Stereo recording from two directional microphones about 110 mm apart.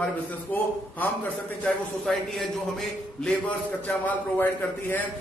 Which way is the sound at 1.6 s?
Centre (ahead or behind).